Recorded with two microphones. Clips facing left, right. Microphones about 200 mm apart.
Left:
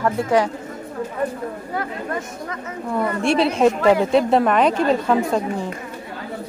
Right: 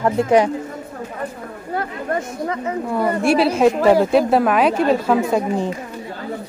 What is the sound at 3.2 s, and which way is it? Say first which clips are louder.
A woman's voice: right 2 dB; 5° right (ahead or behind).